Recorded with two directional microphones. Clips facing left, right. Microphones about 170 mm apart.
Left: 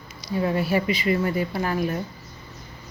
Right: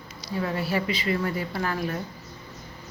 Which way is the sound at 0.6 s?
15° left (ahead or behind).